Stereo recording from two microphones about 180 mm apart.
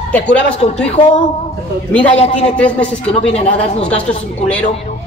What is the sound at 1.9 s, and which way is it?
Speech, 10° left (ahead or behind).